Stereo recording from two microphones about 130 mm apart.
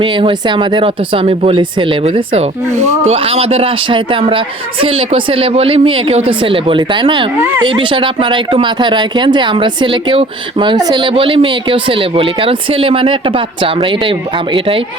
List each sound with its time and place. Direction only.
0.0 s speech: 40° right (ahead or behind)